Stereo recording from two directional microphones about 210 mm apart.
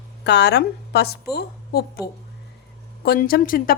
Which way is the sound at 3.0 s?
45° left (ahead or behind).